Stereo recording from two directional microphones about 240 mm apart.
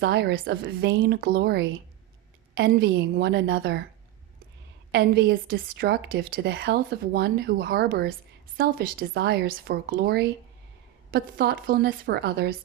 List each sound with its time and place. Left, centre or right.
0.0 s a woman's voice: right
4.9 s a woman's voice: right